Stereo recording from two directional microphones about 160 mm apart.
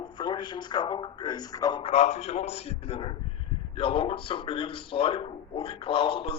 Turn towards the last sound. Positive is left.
turn(degrees=35)  # may be behind; listen again after turning